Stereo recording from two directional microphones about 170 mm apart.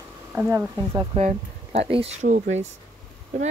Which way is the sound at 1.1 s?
40° right (ahead or behind).